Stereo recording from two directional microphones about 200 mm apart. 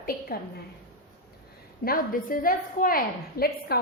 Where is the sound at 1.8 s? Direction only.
45° left (ahead or behind).